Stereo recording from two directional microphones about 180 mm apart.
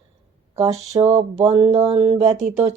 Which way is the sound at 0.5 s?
15° right (ahead or behind).